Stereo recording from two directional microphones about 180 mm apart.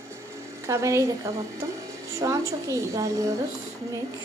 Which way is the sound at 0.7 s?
15° right (ahead or behind).